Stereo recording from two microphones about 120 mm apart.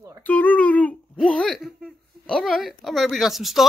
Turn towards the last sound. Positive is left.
turn(degrees=0)  # may be behind; listen again after turning